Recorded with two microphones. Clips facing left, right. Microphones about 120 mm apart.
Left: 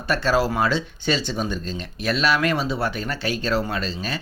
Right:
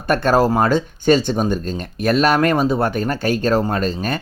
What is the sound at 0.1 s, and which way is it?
Speech, 50° right (ahead or behind).